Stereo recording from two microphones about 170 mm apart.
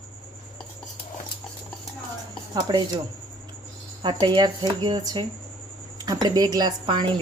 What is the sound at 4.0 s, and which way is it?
Speech, 25° right (ahead or behind).